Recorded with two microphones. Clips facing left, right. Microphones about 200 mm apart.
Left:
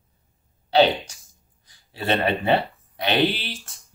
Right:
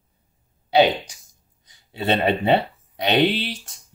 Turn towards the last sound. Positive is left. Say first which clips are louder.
# right 5 dB
turn(degrees=-20)  # may be behind; listen again after turning